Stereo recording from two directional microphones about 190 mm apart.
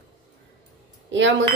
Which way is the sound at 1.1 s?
75° right (ahead or behind).